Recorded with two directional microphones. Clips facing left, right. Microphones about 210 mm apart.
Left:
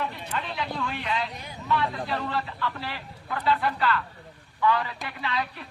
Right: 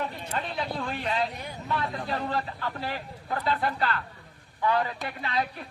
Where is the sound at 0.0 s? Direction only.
35° right (ahead or behind).